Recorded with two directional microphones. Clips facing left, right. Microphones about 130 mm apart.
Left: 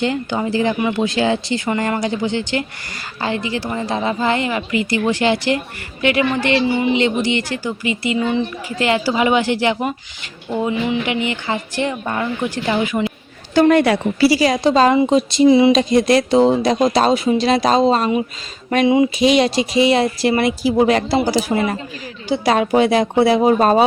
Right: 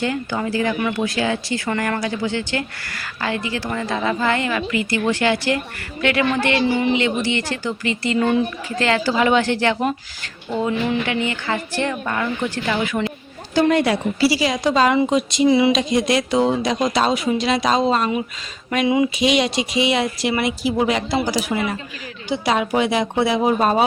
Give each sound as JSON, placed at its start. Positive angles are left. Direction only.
{"t": 0.0, "sound": "speech", "side_deg": 20}
{"t": 13.5, "sound": "a woman's voice", "side_deg": 55}
{"t": 14.6, "sound": "speech", "side_deg": 30}
{"t": 15.7, "sound": "speech", "side_deg": 40}
{"t": 19.2, "sound": "speech", "side_deg": 35}